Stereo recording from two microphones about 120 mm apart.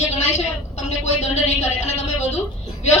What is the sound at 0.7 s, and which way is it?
Speech, 70° left (ahead or behind).